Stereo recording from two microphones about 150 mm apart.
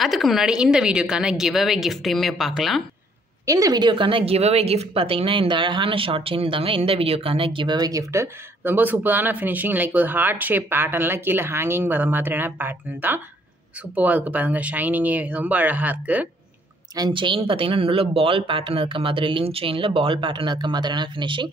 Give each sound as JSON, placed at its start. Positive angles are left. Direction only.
{"t": 0.0, "sound": "a woman's voice", "side_deg": 0}
{"t": 3.4, "sound": "speech", "side_deg": -20}
{"t": 16.9, "sound": "speech", "side_deg": -30}